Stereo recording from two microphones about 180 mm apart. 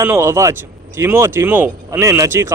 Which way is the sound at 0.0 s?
15° right (ahead or behind).